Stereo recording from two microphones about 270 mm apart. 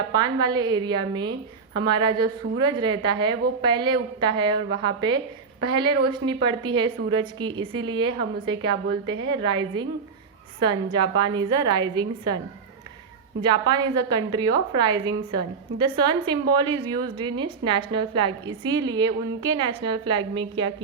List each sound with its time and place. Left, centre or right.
0.1 s a woman's voice: centre
13.4 s a woman's voice: centre